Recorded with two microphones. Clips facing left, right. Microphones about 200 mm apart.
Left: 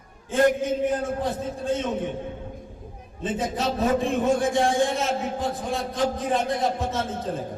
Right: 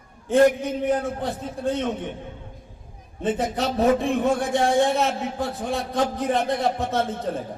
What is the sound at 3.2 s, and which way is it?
A man's voice, 60° right (ahead or behind).